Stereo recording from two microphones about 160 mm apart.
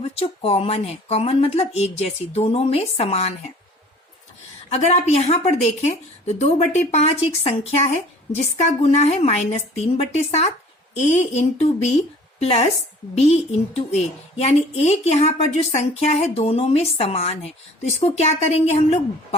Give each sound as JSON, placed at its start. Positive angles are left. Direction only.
{"t": 0.2, "sound": "a woman's voice", "side_deg": 40}
{"t": 4.7, "sound": "a woman's voice", "side_deg": 45}